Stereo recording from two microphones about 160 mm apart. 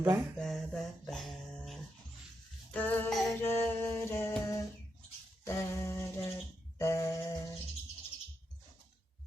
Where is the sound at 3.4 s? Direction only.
15° left (ahead or behind).